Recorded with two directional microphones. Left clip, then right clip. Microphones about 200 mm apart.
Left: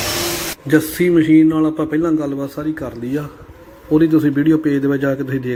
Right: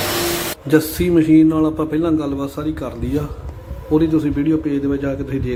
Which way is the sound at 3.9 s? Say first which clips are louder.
Left 3 dB; 15° left (ahead or behind).